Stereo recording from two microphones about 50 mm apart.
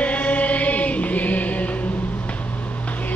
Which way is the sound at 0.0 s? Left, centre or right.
Left.